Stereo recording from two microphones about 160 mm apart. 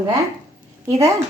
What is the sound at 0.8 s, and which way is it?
Speech, 20° right (ahead or behind).